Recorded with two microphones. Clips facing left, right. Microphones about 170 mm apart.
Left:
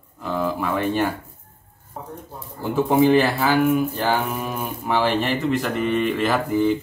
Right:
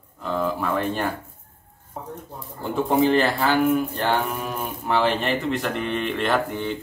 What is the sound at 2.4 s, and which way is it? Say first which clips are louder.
Speech: left 3 dB; centre (ahead or behind).